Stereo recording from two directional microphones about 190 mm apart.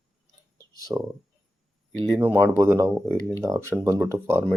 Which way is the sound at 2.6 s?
15° right (ahead or behind).